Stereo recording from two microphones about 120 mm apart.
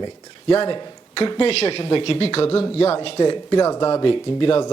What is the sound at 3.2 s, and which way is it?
Speech, 35° left (ahead or behind).